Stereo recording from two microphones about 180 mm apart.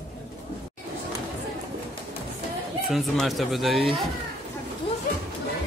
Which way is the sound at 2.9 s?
Centre (ahead or behind).